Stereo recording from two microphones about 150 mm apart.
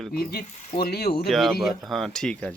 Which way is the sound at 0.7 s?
90° left.